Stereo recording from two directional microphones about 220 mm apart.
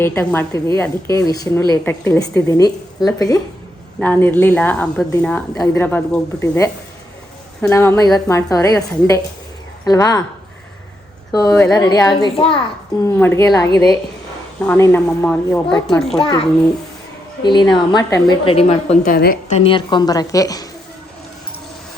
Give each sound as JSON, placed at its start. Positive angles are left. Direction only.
{"t": 0.0, "sound": "speech", "side_deg": 10}
{"t": 7.7, "sound": "speech", "side_deg": 15}
{"t": 11.3, "sound": "speech", "side_deg": 15}
{"t": 13.1, "sound": "speech", "side_deg": 10}
{"t": 16.2, "sound": "a woman's voice", "side_deg": 25}
{"t": 19.0, "sound": "a woman's voice", "side_deg": 40}